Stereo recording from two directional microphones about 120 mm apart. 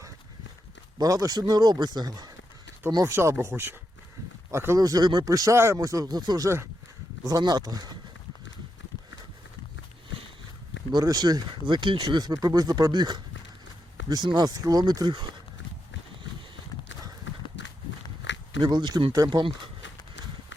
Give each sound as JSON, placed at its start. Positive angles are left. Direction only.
{"t": 0.9, "sound": "speech", "side_deg": -30}
{"t": 10.9, "sound": "speech", "side_deg": -35}
{"t": 18.6, "sound": "speech", "side_deg": -40}